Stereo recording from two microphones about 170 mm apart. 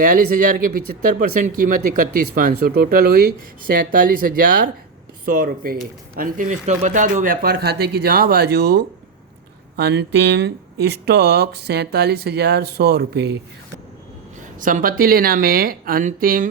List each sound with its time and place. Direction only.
0.0 s speech: 50° right (ahead or behind); by 8.8 s 70° right (ahead or behind)
9.7 s speech: 80° right
14.6 s speech: 50° right (ahead or behind)